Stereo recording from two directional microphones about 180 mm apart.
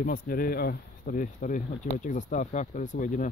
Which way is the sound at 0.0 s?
50° left (ahead or behind).